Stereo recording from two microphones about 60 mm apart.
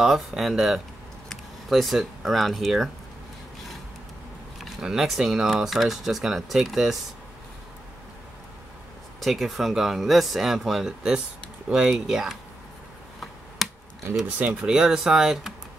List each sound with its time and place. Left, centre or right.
0.0 s speech: centre
4.6 s speech: centre
9.2 s speech: centre
13.6 s computer keyboard: centre
14.2 s speech: right
14.6 s speech: centre